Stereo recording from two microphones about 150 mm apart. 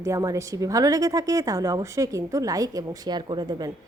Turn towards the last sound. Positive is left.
turn(degrees=-25)  # may be behind; listen again after turning